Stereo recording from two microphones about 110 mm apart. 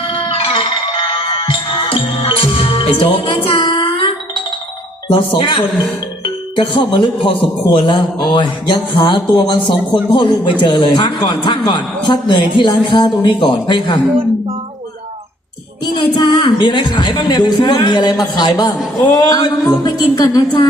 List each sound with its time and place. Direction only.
0.0 s music: 55° left (ahead or behind)
5.1 s a man's voice: 55° left (ahead or behind)
15.8 s a woman's voice: 40° left (ahead or behind)